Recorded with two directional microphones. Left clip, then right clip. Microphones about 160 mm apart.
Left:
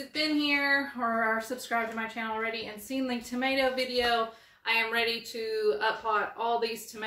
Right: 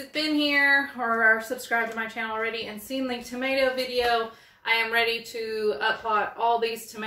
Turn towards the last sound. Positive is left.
turn(degrees=15)  # may be behind; listen again after turning